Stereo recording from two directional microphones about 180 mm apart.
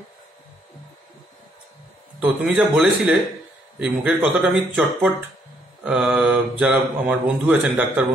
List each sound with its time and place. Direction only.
2.1 s speech: 5° right (ahead or behind)